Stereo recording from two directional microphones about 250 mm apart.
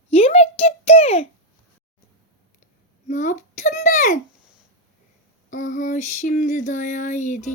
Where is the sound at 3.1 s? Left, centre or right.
Left.